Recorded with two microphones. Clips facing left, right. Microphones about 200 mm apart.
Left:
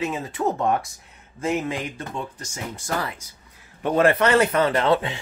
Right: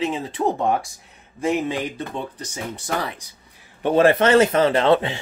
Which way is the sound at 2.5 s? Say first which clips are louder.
Right 2 dB; 35° right (ahead or behind).